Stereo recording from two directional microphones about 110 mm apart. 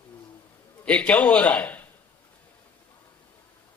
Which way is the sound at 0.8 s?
10° left (ahead or behind).